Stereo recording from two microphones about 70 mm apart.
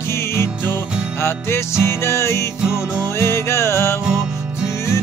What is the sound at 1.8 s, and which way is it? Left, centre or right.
Music, left.